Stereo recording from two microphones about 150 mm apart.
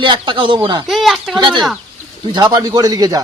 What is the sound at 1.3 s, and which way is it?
A man's voice, 30° right (ahead or behind).